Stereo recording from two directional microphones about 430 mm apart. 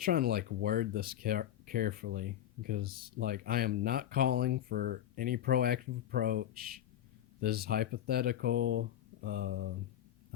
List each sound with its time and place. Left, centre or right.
0.0 s speech: centre